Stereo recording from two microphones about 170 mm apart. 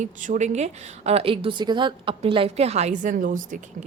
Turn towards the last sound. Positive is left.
turn(degrees=-50)  # may be behind; listen again after turning